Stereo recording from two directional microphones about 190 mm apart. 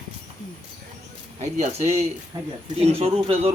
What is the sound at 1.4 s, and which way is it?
A man's voice, 35° right (ahead or behind).